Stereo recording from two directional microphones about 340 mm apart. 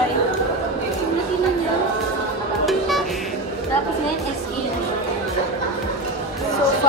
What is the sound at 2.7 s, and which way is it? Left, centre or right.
Music, centre.